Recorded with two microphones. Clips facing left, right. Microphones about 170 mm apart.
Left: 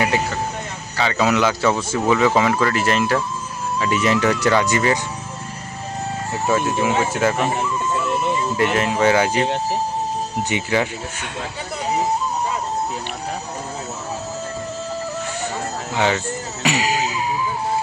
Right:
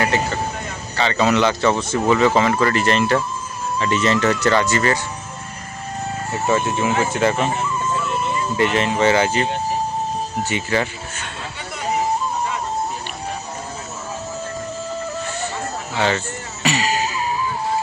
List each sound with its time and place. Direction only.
0.9 s speech: 5° left (ahead or behind)
6.3 s speech: centre (ahead or behind)
7.4 s music: 15° left (ahead or behind)
8.5 s speech: 5° left (ahead or behind)
10.5 s speech: 15° left (ahead or behind)
16.0 s speech: 15° left (ahead or behind)
16.6 s music: 15° left (ahead or behind)